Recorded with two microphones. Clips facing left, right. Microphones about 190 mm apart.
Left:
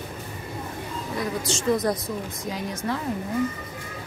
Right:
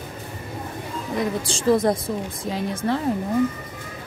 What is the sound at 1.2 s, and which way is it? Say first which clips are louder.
Speech: right 3 dB; 30° right (ahead or behind).